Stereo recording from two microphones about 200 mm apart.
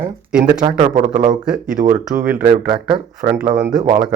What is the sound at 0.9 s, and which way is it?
Speech, 40° right (ahead or behind).